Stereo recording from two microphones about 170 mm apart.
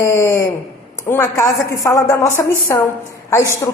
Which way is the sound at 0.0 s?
15° left (ahead or behind).